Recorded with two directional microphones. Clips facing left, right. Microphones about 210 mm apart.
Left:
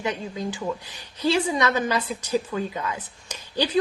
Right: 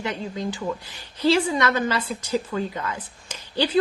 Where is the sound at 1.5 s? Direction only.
15° left (ahead or behind).